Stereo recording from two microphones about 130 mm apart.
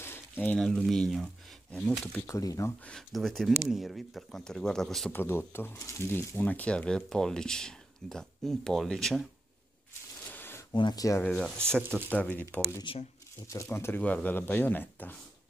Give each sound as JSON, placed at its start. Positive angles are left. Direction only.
{"t": 0.0, "sound": "speech", "side_deg": 15}
{"t": 2.2, "sound": "speech", "side_deg": 25}
{"t": 2.9, "sound": "speech", "side_deg": 0}
{"t": 5.1, "sound": "speech", "side_deg": 15}
{"t": 10.3, "sound": "a sound", "side_deg": 15}
{"t": 10.7, "sound": "speech", "side_deg": 35}
{"t": 11.2, "sound": "speech", "side_deg": 5}
{"t": 12.9, "sound": "speech", "side_deg": 40}
{"t": 13.5, "sound": "speech", "side_deg": 20}